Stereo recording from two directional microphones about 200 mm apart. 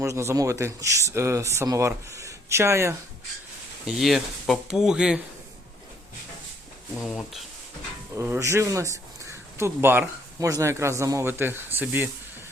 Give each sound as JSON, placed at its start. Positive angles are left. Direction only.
{"t": 0.0, "sound": "speech", "side_deg": -15}
{"t": 3.8, "sound": "speech", "side_deg": 0}
{"t": 6.9, "sound": "speech", "side_deg": 5}
{"t": 8.1, "sound": "speech", "side_deg": -15}